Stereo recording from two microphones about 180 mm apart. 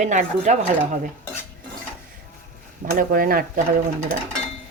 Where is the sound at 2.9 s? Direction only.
55° right (ahead or behind).